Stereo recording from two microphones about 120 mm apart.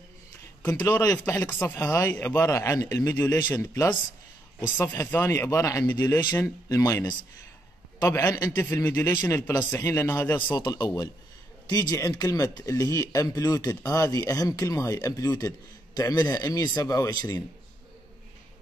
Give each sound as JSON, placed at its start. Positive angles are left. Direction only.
{"t": 0.6, "sound": "a sound", "side_deg": 10}
{"t": 1.0, "sound": "speech", "side_deg": 20}
{"t": 3.5, "sound": "speech", "side_deg": 30}
{"t": 4.7, "sound": "speech", "side_deg": 15}
{"t": 10.5, "sound": "speech", "side_deg": 35}